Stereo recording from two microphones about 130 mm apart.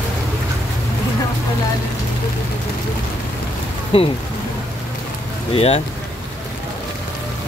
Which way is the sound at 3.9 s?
45° left (ahead or behind).